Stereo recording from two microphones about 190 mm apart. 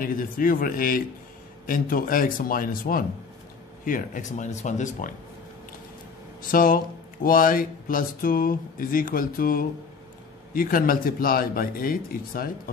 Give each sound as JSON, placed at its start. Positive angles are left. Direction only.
{"t": 0.0, "sound": "speech", "side_deg": 45}
{"t": 6.5, "sound": "speech", "side_deg": 50}